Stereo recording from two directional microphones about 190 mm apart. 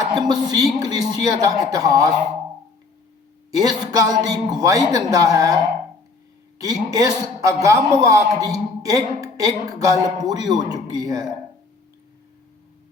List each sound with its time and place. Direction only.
0.1 s a man's voice: 20° right (ahead or behind)
3.9 s a man's voice: 20° right (ahead or behind)
6.6 s a man's voice: 20° right (ahead or behind)